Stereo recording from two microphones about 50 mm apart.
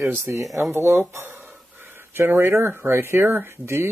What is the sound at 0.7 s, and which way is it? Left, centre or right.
Speech, right.